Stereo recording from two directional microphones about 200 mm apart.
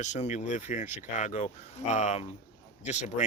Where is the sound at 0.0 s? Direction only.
35° left (ahead or behind).